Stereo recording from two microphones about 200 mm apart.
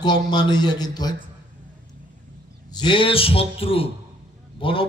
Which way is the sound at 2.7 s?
25° left (ahead or behind).